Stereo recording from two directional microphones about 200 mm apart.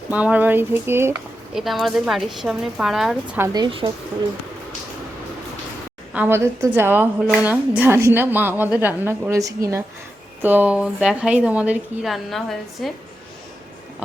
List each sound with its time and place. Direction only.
0.1 s a woman's voice: 5° right (ahead or behind)
1.5 s speech: centre (ahead or behind)
3.4 s speech: 20° right (ahead or behind)
6.1 s a woman's voice: 10° right (ahead or behind)